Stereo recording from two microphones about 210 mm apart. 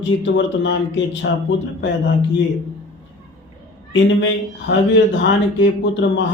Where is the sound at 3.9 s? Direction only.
60° left (ahead or behind).